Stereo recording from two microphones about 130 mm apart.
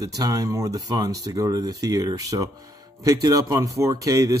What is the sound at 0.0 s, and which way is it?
Speech, 30° right (ahead or behind).